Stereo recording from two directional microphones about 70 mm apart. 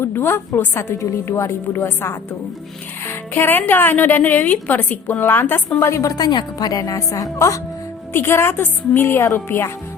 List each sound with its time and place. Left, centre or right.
0.0 s a woman's voice: left
5.8 s a woman's voice: left
6.1 s a woman's voice: left
8.1 s a woman's voice: left